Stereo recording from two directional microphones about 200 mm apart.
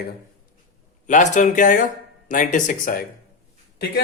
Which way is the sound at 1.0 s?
40° left (ahead or behind).